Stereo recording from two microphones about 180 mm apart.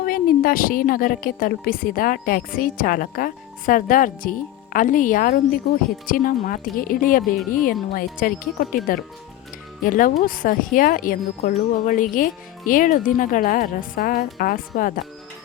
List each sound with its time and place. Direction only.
0.0 s a woman's voice: 50° left (ahead or behind)
9.8 s a woman's voice: 50° left (ahead or behind)